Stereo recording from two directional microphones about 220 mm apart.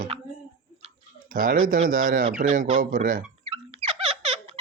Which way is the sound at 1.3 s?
40° right (ahead or behind).